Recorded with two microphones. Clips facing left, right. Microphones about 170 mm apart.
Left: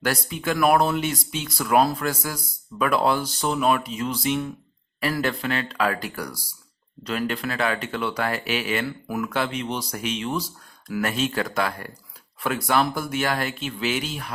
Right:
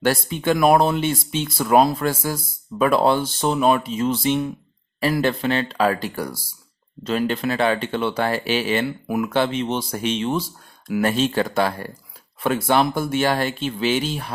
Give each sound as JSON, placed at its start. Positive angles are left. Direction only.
{"t": 0.0, "sound": "speech", "side_deg": -25}